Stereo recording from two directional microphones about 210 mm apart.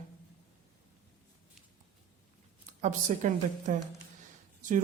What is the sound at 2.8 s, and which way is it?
Speech, 35° right (ahead or behind).